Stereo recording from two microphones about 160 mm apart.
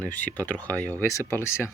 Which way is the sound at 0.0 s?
10° left (ahead or behind).